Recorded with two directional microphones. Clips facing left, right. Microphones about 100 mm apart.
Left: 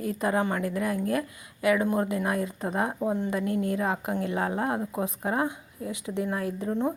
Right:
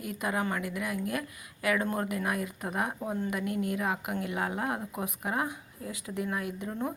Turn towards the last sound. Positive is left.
turn(degrees=25)  # may be behind; listen again after turning